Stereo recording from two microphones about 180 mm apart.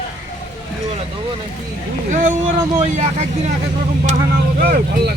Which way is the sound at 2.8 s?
40° right (ahead or behind).